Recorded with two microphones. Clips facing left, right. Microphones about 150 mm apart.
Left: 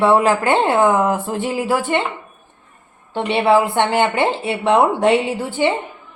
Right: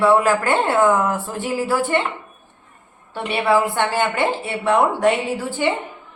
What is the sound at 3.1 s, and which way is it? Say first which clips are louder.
Speech: left 3 dB; 20° left (ahead or behind).